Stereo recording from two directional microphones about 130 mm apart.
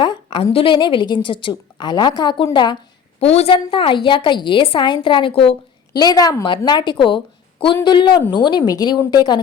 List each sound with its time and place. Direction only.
0.0 s a woman's voice: 35° left (ahead or behind)
3.2 s a woman's voice: 50° left (ahead or behind)
6.0 s a woman's voice: 30° left (ahead or behind)